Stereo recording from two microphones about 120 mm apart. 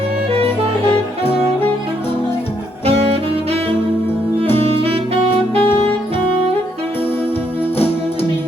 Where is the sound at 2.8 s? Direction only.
55° right (ahead or behind).